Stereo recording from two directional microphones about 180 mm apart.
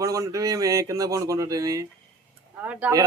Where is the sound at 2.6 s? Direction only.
10° right (ahead or behind).